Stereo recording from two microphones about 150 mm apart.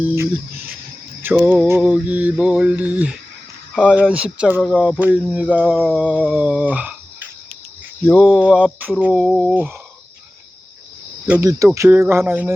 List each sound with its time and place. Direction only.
0.0 s mantra: 15° right (ahead or behind)
4.6 s a sound: centre (ahead or behind)
4.9 s mantra: 10° right (ahead or behind)
8.1 s a sound: 5° left (ahead or behind)
8.4 s mantra: 10° right (ahead or behind)
11.4 s mantra: 20° right (ahead or behind)